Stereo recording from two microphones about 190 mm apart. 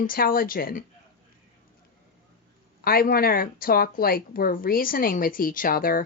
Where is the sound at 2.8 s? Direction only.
50° left (ahead or behind).